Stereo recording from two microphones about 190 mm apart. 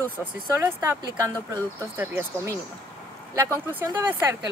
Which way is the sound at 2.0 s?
10° right (ahead or behind).